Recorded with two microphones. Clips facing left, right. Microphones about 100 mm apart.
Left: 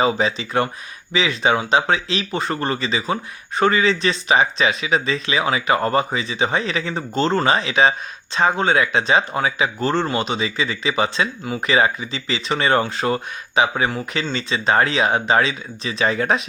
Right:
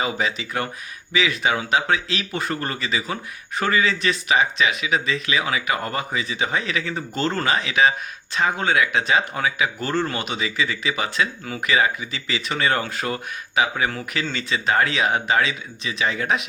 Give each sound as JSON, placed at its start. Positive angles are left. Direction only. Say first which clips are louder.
{"t": 0.0, "sound": "speech", "louder": "left 5 dB", "side_deg": 30}